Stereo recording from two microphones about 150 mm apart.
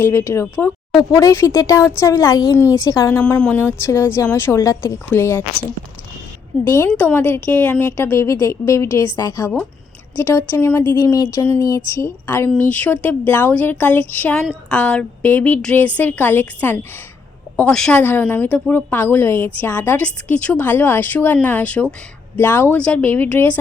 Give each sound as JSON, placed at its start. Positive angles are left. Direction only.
{"t": 0.0, "sound": "a woman's voice", "side_deg": 15}
{"t": 6.7, "sound": "a woman's voice", "side_deg": 15}